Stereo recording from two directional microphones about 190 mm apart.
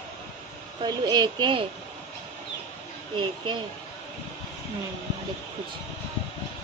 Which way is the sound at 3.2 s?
25° right (ahead or behind).